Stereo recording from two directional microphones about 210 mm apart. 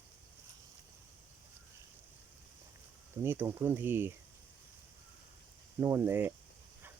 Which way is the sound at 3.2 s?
10° right (ahead or behind).